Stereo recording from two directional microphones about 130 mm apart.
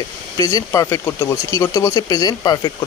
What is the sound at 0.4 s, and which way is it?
Speech, 25° left (ahead or behind).